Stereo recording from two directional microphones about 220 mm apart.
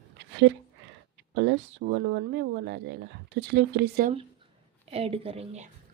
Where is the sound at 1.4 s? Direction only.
55° right (ahead or behind).